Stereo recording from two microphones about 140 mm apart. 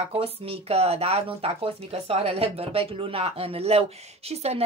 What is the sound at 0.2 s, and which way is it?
Speech, 45° right (ahead or behind).